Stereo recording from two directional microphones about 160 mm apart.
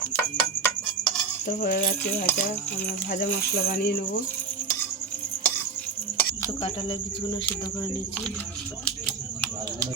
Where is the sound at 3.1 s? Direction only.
65° left (ahead or behind).